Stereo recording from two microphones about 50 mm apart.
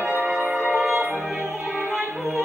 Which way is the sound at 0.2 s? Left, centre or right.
Right.